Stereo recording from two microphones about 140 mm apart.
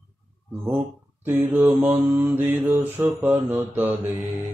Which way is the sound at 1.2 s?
15° right (ahead or behind).